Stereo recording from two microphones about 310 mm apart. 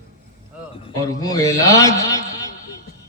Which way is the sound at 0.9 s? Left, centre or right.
Centre.